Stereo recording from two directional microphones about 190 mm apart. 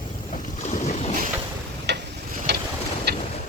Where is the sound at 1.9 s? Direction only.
60° right (ahead or behind).